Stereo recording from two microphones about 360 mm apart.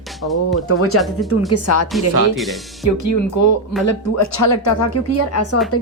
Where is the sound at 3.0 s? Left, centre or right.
Left.